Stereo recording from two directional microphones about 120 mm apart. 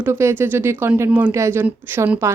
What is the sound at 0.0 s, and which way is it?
A woman's voice, 20° right (ahead or behind).